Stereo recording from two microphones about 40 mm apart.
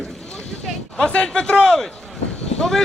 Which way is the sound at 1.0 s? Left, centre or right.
Left.